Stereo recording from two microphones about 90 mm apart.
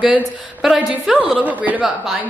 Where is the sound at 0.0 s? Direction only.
5° right (ahead or behind).